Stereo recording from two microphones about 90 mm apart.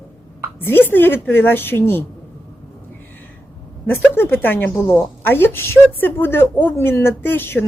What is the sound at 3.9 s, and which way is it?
A woman's voice, 25° left (ahead or behind).